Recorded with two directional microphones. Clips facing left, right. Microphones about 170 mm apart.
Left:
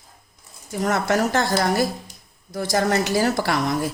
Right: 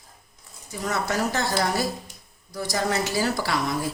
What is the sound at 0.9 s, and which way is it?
Speech, 50° left (ahead or behind).